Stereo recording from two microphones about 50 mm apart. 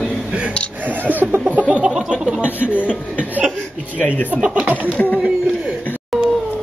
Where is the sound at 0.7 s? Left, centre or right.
Right.